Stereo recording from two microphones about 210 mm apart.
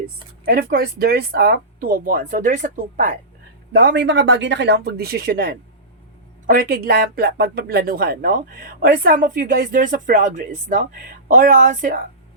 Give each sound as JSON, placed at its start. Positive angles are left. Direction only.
{"t": 0.0, "sound": "speech", "side_deg": -45}
{"t": 3.7, "sound": "speech", "side_deg": -55}